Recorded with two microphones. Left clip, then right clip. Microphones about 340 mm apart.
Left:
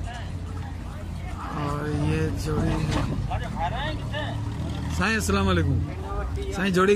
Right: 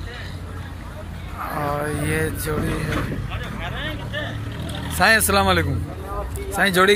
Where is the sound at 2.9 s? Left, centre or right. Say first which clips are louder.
Right 2 dB; left.